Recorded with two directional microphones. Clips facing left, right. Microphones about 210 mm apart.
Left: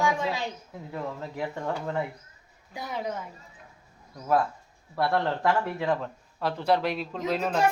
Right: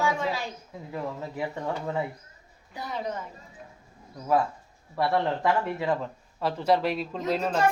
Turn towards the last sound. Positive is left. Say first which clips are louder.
# even
turn(degrees=5)  # may be behind; listen again after turning